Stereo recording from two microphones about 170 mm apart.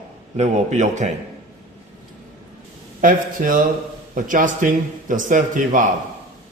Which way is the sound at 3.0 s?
55° right (ahead or behind).